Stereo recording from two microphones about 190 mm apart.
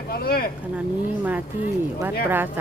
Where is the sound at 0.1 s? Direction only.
55° left (ahead or behind).